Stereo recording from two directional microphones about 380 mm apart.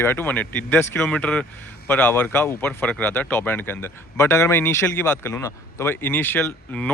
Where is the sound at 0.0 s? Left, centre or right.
Centre.